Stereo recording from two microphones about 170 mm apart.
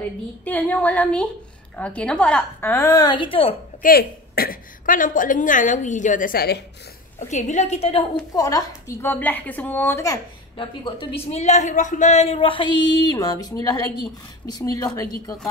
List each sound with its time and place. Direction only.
0.5 s a woman's voice: 10° left (ahead or behind)
2.7 s a woman's voice: 20° left (ahead or behind)
3.8 s a woman's voice: 60° left (ahead or behind)
7.2 s a woman's voice: 45° left (ahead or behind)
8.3 s a woman's voice: 20° left (ahead or behind)
10.6 s a man's voice: 30° left (ahead or behind)